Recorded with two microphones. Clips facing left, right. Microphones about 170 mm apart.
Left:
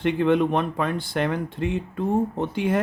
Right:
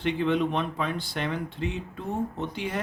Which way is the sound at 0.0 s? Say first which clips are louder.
Left 5 dB; 55° left (ahead or behind).